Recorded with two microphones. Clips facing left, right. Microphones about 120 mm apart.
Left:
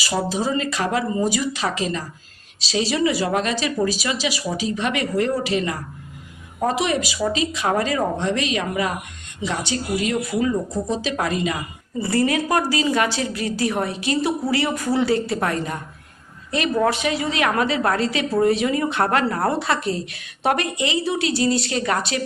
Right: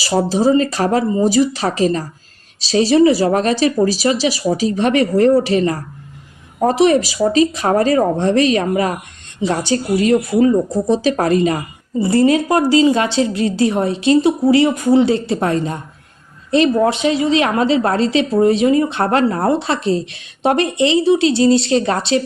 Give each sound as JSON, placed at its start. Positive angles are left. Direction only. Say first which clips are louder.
{"t": 0.0, "sound": "speech", "louder": "right 8 dB", "side_deg": -35}
{"t": 11.9, "sound": "a woman's voice", "louder": "right 7 dB", "side_deg": -25}